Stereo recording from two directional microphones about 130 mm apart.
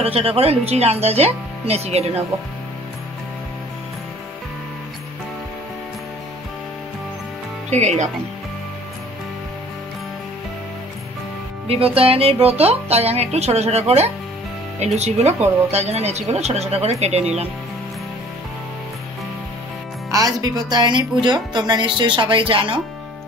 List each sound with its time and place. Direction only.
0.0 s speech: 50° right (ahead or behind)
7.7 s speech: 60° right (ahead or behind)
11.6 s speech: 50° right (ahead or behind)
20.1 s speech: 30° right (ahead or behind)